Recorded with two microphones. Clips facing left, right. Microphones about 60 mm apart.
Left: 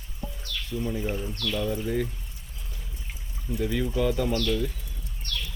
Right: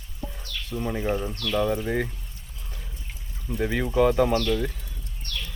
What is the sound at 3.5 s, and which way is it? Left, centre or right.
Speech, right.